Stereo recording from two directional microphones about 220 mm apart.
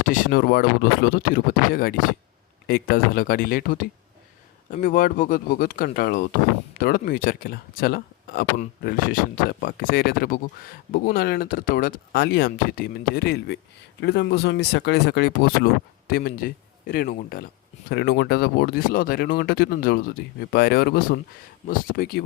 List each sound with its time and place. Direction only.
0.0 s speech: 35° left (ahead or behind)